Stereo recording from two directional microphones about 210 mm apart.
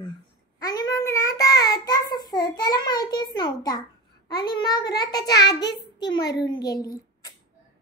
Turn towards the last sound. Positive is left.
turn(degrees=15)  # may be behind; listen again after turning